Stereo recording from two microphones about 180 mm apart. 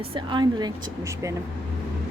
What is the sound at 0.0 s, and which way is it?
Speech, 30° right (ahead or behind).